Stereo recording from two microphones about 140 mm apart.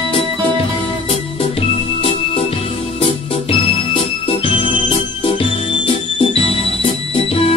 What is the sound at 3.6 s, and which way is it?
Organ, 40° left (ahead or behind).